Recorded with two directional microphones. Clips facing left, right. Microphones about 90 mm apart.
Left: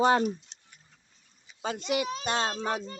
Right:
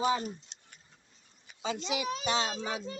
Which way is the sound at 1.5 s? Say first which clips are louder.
Even; 55° right (ahead or behind).